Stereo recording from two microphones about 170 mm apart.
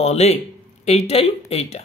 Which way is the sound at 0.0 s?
40° left (ahead or behind).